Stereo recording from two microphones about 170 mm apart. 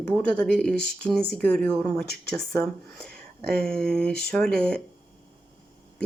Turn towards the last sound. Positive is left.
turn(degrees=5)  # may be behind; listen again after turning